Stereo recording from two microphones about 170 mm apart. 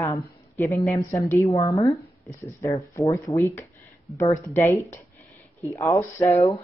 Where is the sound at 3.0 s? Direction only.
20° left (ahead or behind).